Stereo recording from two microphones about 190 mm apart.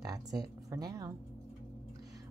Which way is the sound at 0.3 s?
20° right (ahead or behind).